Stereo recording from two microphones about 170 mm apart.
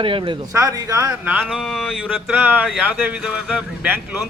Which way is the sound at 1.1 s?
5° right (ahead or behind).